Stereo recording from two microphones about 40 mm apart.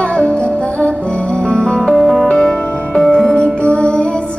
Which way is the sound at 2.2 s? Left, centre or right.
Left.